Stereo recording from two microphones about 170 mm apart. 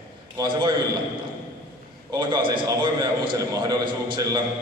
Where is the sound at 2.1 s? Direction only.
25° right (ahead or behind).